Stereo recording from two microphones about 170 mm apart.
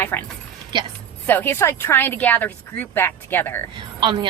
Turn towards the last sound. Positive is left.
turn(degrees=-30)  # may be behind; listen again after turning